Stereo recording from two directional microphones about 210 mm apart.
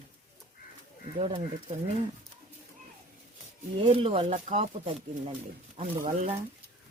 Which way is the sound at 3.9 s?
25° right (ahead or behind).